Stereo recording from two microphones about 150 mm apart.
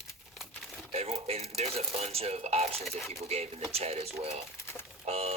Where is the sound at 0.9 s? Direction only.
40° right (ahead or behind).